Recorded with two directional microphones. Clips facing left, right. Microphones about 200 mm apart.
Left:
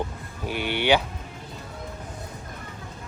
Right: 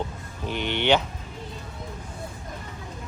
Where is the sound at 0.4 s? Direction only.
10° left (ahead or behind).